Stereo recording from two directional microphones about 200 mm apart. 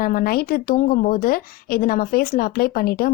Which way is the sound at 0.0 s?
45° left (ahead or behind).